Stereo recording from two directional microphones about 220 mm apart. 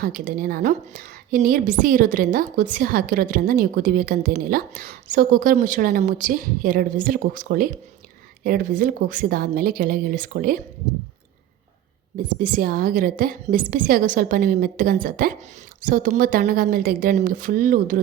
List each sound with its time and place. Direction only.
0.0 s a woman's voice: 40° right (ahead or behind)
12.4 s a woman's voice: 40° right (ahead or behind)